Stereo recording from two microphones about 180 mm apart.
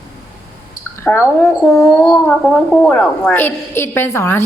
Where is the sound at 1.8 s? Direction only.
Centre (ahead or behind).